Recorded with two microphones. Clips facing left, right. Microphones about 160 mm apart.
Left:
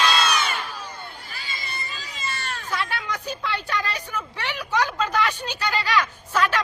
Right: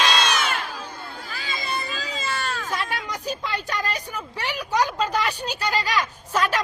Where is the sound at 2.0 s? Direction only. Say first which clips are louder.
Right 2 dB; 90° right.